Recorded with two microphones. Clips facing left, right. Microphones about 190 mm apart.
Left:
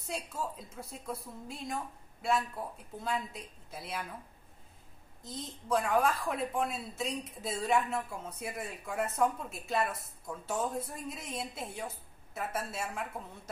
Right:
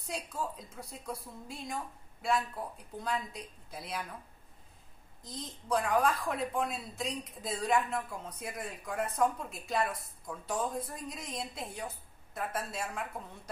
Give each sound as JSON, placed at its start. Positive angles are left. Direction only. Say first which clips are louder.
{"t": 0.1, "sound": "a woman's voice", "louder": "even", "side_deg": 0}
{"t": 5.2, "sound": "a woman's voice", "louder": "left 1 dB", "side_deg": 5}